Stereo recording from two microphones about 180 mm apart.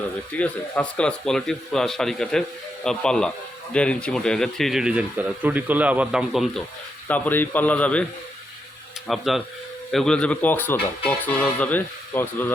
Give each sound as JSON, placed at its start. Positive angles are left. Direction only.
{"t": 0.3, "sound": "speech", "side_deg": 5}
{"t": 7.1, "sound": "speech", "side_deg": 10}
{"t": 9.0, "sound": "speech", "side_deg": 0}